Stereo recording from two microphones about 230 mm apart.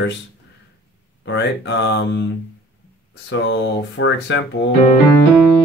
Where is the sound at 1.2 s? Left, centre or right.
Left.